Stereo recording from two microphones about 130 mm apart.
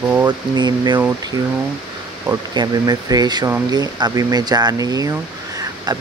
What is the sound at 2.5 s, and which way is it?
Speech, 30° right (ahead or behind).